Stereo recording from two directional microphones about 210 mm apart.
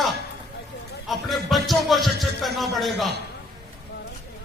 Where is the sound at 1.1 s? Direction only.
Centre (ahead or behind).